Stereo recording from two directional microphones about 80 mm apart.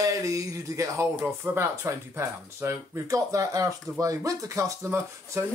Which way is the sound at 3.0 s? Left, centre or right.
Right.